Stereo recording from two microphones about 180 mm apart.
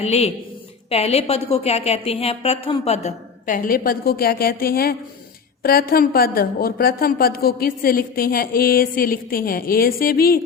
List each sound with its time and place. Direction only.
0.0 s a woman's voice: 35° left (ahead or behind); by 10.4 s 55° left (ahead or behind)